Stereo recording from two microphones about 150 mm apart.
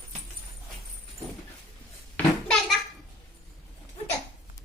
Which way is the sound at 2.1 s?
5° left (ahead or behind).